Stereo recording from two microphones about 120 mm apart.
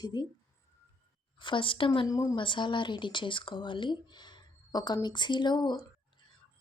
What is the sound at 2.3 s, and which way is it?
Speech, 40° left (ahead or behind).